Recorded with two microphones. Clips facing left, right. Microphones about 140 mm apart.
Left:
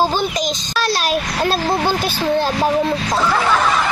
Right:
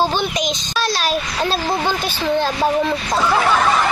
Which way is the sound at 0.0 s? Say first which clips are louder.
Left 1 dB; 10° left (ahead or behind).